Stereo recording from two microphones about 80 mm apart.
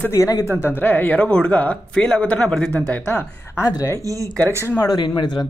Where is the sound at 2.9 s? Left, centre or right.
Left.